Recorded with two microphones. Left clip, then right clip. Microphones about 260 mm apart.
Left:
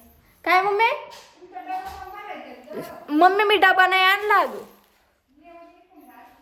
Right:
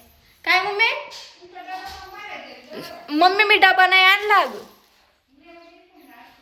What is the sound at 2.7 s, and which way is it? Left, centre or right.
A woman's voice, centre.